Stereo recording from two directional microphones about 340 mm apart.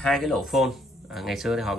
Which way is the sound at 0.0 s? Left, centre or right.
Centre.